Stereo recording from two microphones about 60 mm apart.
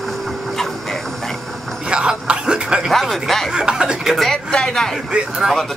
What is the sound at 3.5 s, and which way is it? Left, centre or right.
Speech, centre.